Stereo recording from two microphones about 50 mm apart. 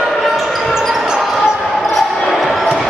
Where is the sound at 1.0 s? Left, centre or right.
Centre.